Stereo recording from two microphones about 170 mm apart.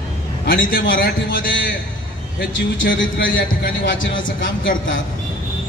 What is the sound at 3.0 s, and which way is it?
Speech, 90° left.